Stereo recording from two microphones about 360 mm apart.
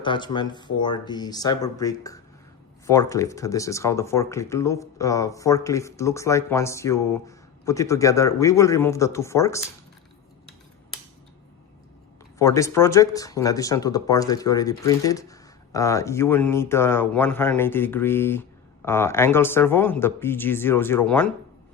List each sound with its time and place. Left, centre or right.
0.0 s speech: centre
12.4 s speech: centre